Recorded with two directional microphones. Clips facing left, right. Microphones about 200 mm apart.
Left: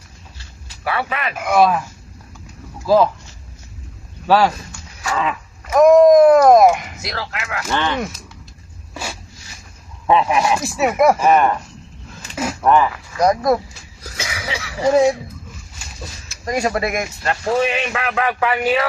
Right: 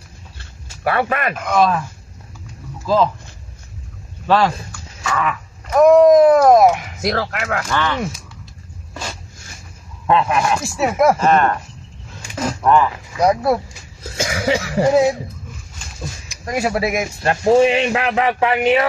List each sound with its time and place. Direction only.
0.4 s a sound: 50° right (ahead or behind)
1.3 s speech: 10° left (ahead or behind)
2.9 s speech: 10° left (ahead or behind)
5.1 s a sound: 20° left (ahead or behind)
5.7 s speech: centre (ahead or behind)
7.0 s cough: 50° right (ahead or behind)
7.7 s a sound: 20° left (ahead or behind)
10.0 s speech: 5° left (ahead or behind)
12.4 s a sound: 5° left (ahead or behind)
13.2 s speech: 10° right (ahead or behind)
14.1 s cough: 50° right (ahead or behind)
14.9 s speech: 10° right (ahead or behind)
16.3 s speech: 5° right (ahead or behind)
17.2 s speech: 25° right (ahead or behind)